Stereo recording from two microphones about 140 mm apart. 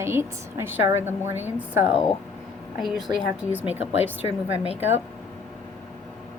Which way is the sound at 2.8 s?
Centre (ahead or behind).